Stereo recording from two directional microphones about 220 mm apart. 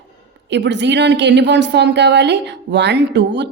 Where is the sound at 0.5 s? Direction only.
50° right (ahead or behind).